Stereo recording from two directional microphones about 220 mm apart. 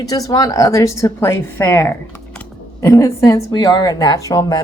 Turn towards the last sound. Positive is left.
turn(degrees=15)  # may be behind; listen again after turning